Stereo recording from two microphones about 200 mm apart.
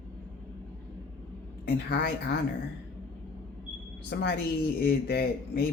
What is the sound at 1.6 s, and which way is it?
Speech, 55° left (ahead or behind).